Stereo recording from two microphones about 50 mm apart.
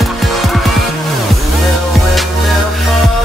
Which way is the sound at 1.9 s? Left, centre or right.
Centre.